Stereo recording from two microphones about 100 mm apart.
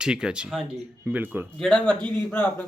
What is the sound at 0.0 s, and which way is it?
Speech, 10° right (ahead or behind).